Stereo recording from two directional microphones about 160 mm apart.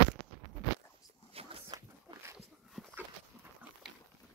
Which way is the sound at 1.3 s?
35° right (ahead or behind).